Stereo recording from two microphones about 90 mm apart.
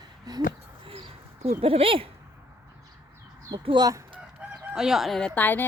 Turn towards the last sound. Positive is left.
turn(degrees=20)  # may be behind; listen again after turning